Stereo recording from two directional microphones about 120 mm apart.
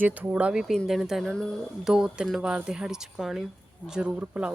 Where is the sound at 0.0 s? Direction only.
15° right (ahead or behind).